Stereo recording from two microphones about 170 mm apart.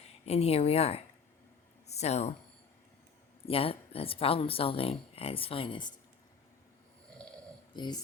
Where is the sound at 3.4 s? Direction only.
35° left (ahead or behind).